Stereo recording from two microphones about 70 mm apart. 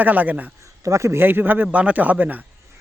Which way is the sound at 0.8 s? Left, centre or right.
Right.